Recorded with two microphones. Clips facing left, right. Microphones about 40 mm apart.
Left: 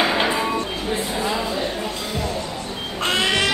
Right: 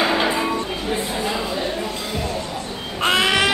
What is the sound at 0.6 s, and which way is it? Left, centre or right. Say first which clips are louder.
Music: even; centre.